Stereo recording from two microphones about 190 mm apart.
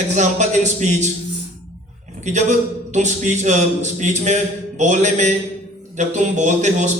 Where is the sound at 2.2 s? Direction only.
40° right (ahead or behind).